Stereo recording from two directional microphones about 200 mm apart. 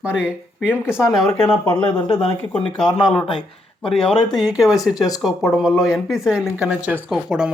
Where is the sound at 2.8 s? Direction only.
20° left (ahead or behind).